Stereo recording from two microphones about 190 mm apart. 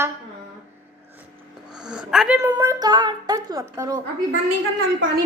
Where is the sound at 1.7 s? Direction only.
5° right (ahead or behind).